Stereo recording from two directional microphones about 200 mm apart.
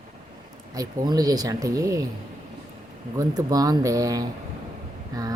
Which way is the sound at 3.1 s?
15° right (ahead or behind).